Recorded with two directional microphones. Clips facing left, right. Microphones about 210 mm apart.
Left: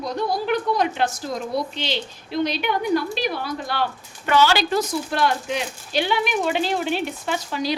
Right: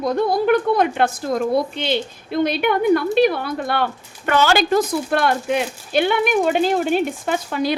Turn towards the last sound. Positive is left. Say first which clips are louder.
# right 4 dB
turn(degrees=-55)  # may be behind; listen again after turning